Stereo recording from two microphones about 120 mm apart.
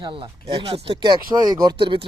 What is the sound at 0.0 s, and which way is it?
Speech, 45° right (ahead or behind).